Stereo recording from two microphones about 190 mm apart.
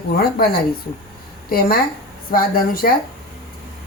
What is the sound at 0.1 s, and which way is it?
Speech, 55° left (ahead or behind).